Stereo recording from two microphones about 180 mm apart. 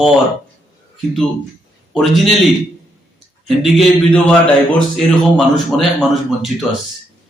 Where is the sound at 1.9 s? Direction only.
Centre (ahead or behind).